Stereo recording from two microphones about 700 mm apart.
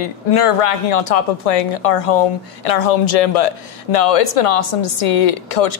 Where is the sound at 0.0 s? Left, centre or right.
Left.